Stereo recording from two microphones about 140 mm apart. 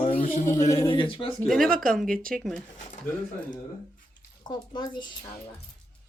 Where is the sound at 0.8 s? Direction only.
40° left (ahead or behind).